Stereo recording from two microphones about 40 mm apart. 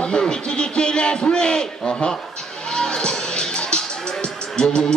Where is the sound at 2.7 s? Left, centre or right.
Centre.